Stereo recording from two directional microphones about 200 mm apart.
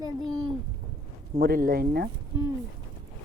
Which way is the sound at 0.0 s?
20° right (ahead or behind).